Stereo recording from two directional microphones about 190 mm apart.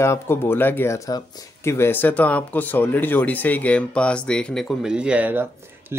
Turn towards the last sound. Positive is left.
turn(degrees=-10)  # may be behind; listen again after turning